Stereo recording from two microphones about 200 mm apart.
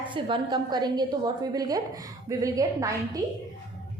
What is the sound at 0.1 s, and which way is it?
A woman's voice, 20° right (ahead or behind).